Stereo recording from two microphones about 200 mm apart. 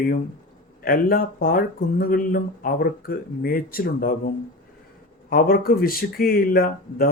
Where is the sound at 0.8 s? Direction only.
45° left (ahead or behind).